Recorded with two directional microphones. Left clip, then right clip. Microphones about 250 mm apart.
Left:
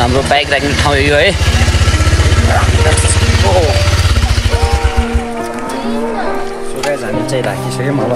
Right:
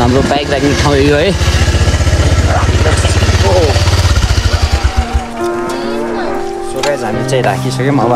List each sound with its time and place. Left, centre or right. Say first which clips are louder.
0.8 s speech: left 1 dB; centre
3.4 s speech: right 1 dB; centre